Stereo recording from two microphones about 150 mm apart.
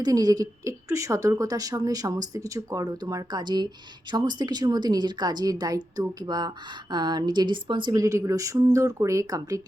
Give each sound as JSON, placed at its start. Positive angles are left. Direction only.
{"t": 0.0, "sound": "a woman's voice", "side_deg": -25}